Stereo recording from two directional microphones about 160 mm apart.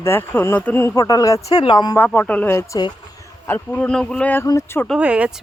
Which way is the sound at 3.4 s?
15° left (ahead or behind).